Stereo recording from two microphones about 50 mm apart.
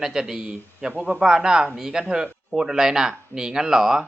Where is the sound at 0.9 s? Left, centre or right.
Right.